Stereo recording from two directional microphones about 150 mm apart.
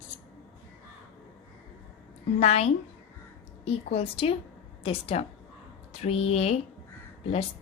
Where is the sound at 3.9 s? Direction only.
40° left (ahead or behind).